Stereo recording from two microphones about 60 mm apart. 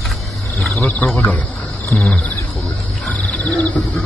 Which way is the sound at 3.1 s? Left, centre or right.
Left.